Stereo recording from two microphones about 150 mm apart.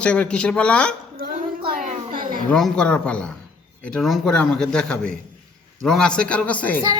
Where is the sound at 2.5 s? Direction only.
5° left (ahead or behind).